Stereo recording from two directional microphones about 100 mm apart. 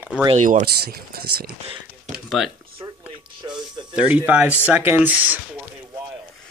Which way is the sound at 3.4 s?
45° right (ahead or behind).